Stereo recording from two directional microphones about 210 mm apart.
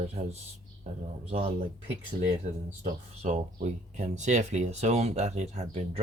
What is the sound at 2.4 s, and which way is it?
Speech, 35° right (ahead or behind).